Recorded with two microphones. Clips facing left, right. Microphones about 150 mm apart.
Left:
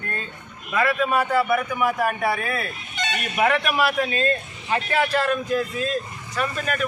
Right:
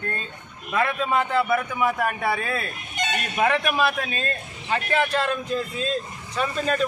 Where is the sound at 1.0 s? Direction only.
20° right (ahead or behind).